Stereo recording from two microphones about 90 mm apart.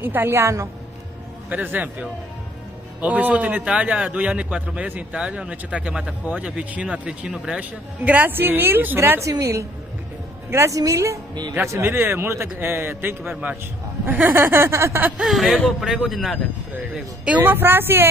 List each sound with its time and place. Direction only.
0.0 s a man's voice: 25° right (ahead or behind)
1.5 s a man's voice: 20° right (ahead or behind)
9.2 s a woman's voice: 35° right (ahead or behind)
14.3 s a man's voice: 25° right (ahead or behind)
15.2 s a man's voice: centre (ahead or behind)
17.4 s a man's voice: 20° right (ahead or behind)